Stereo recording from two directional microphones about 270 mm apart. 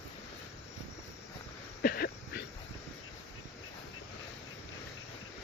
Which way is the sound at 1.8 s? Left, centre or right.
Left.